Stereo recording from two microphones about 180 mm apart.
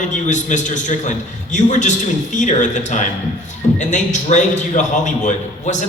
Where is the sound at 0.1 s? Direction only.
45° left (ahead or behind).